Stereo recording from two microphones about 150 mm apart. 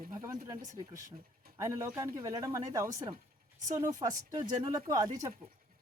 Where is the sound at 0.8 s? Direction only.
25° right (ahead or behind).